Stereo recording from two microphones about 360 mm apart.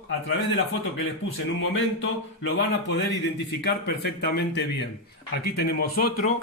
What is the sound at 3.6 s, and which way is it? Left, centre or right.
Speech, left.